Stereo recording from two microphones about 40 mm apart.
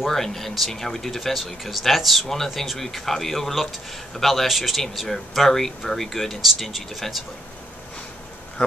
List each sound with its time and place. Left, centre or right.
0.1 s speech: centre
6.4 s speech: centre
8.6 s speech: left